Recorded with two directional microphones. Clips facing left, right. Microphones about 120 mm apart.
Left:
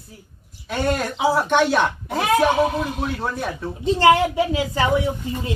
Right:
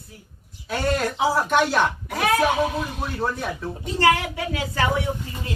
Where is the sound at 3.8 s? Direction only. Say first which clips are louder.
Left 5 dB; 25° left (ahead or behind).